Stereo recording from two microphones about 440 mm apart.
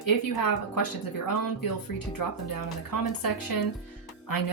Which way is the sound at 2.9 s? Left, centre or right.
Left.